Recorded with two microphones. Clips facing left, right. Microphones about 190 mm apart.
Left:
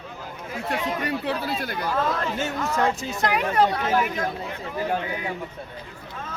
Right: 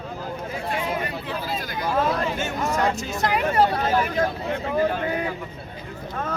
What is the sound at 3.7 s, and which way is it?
Speech, 30° right (ahead or behind).